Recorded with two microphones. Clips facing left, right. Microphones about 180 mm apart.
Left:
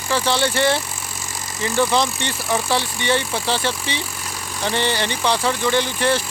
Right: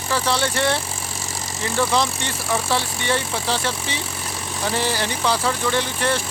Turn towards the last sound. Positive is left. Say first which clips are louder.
# left 3 dB
turn(degrees=0)  # may be behind; listen again after turning